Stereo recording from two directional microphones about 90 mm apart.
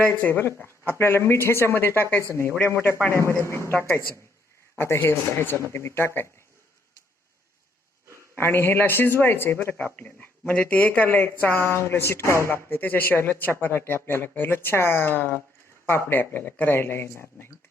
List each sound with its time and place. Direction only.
0.1 s a woman's voice: 20° left (ahead or behind)
4.8 s a woman's voice: 25° left (ahead or behind)
8.4 s speech: 25° left (ahead or behind)